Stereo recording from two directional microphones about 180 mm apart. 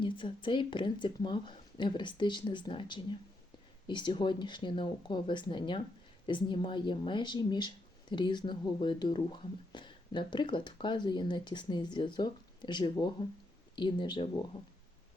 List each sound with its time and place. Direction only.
0.0 s speech: 25° left (ahead or behind)